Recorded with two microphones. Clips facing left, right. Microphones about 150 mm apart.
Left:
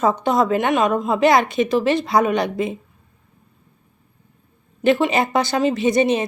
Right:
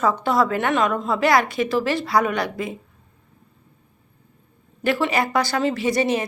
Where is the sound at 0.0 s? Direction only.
20° left (ahead or behind).